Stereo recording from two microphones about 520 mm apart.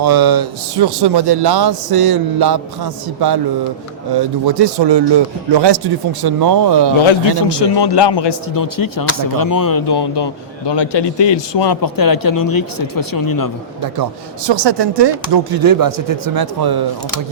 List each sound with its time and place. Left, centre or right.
0.0 s speech: right
7.0 s a man's voice: left
13.8 s speech: right